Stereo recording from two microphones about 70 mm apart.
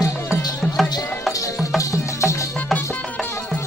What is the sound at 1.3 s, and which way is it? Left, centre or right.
Music, left.